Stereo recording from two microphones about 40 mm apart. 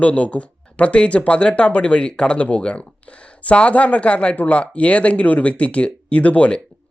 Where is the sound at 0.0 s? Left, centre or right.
Left.